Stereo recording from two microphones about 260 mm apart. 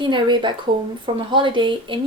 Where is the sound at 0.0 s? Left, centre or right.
Centre.